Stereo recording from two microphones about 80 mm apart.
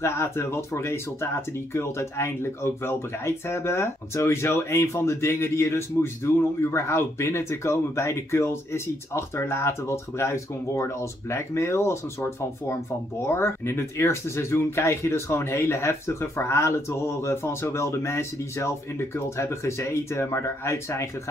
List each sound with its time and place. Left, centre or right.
0.0 s speech: left